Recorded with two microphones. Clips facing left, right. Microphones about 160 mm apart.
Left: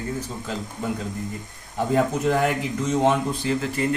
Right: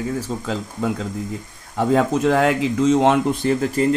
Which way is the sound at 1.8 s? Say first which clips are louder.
Right 4 dB; 90° right.